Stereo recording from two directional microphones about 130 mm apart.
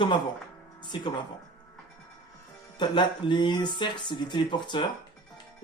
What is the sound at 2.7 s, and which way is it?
Speech, 35° left (ahead or behind).